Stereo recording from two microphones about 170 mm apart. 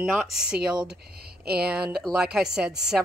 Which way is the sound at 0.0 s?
5° right (ahead or behind).